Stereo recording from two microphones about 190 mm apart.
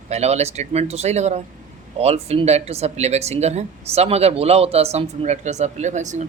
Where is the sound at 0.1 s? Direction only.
35° right (ahead or behind).